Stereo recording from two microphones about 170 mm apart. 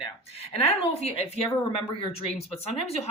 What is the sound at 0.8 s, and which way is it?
Speech, 35° left (ahead or behind).